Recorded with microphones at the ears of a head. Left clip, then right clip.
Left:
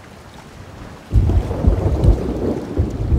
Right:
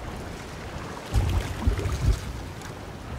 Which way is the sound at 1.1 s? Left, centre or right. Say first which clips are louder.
Left 11 dB; left.